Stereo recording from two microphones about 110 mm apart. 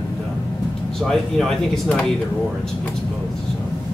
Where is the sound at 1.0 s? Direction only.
5° left (ahead or behind).